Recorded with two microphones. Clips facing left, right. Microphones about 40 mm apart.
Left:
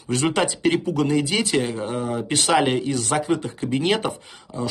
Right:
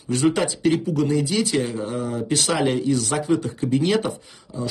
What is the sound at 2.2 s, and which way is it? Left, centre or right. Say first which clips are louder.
Speech: left 3 dB; left.